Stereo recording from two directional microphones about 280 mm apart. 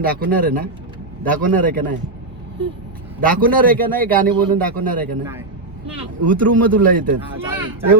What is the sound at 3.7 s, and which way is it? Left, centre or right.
Speech, centre.